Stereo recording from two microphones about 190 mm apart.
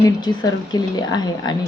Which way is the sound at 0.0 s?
20° left (ahead or behind).